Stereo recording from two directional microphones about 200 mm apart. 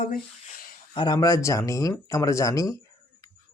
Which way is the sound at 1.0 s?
20° left (ahead or behind).